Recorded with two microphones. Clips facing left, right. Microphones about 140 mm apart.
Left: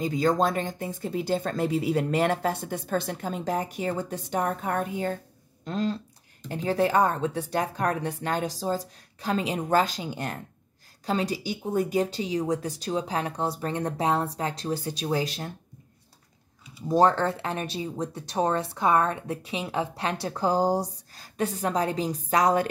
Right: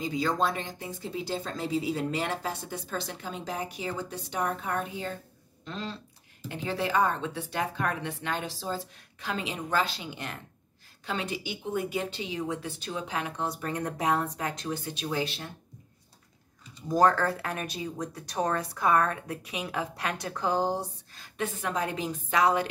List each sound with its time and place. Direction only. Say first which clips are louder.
0.0 s speech: left 4 dB; 45° left (ahead or behind)
16.8 s speech: left 2 dB; 25° left (ahead or behind); by 22.7 s 45° left (ahead or behind)